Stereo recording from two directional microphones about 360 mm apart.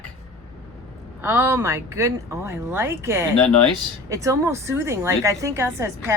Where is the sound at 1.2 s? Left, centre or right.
Centre.